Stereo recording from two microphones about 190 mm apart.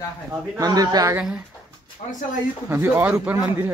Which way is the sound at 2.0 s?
40° left (ahead or behind).